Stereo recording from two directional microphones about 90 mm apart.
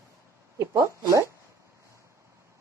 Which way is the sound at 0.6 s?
35° right (ahead or behind).